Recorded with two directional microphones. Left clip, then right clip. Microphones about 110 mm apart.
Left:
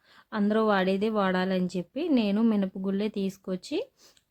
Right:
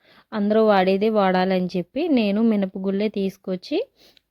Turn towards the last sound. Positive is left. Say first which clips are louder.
# right 7 dB
turn(degrees=-45)  # may be behind; listen again after turning